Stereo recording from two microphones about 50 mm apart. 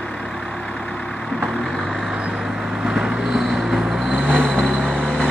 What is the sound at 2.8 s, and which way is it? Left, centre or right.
Vehicle, centre.